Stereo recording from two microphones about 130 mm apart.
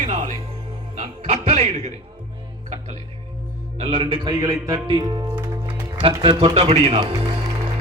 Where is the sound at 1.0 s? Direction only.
60° right (ahead or behind).